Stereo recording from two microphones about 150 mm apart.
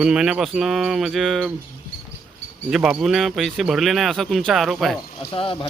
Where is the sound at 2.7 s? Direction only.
5° right (ahead or behind).